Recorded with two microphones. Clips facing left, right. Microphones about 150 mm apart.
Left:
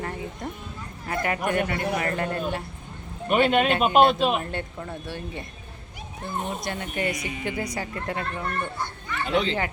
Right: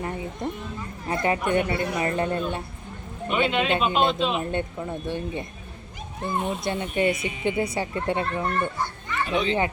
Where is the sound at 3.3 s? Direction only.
50° left (ahead or behind).